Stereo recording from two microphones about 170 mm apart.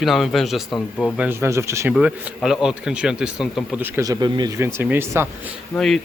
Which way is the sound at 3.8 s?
15° right (ahead or behind).